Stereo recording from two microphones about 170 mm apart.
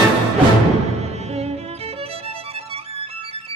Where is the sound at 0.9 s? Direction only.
40° right (ahead or behind).